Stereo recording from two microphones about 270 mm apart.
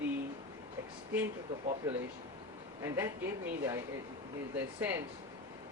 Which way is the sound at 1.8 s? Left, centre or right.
Centre.